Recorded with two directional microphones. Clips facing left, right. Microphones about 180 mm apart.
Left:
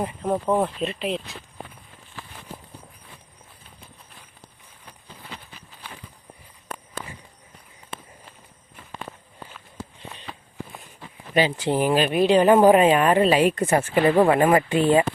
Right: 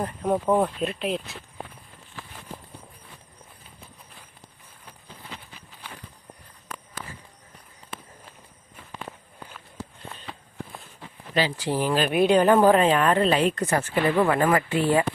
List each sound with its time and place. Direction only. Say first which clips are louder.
0.0 s speech: even; 5° left (ahead or behind)
11.3 s speech: left 4 dB; 20° left (ahead or behind)
11.9 s speech: even; centre (ahead or behind)
12.5 s speech: left 3 dB; 15° left (ahead or behind)
13.7 s speech: left 4 dB; 25° left (ahead or behind)